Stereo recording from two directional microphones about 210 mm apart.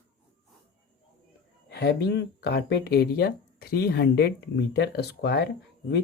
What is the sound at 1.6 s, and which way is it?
Speech, 50° left (ahead or behind).